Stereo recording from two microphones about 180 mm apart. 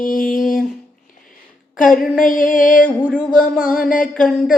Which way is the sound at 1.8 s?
50° left (ahead or behind).